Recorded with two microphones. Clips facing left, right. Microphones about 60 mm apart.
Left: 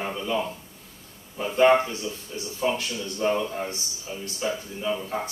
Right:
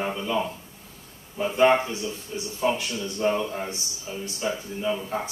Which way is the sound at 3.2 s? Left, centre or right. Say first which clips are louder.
Even; centre.